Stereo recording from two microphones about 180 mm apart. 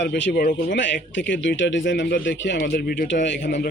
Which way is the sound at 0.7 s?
90° left.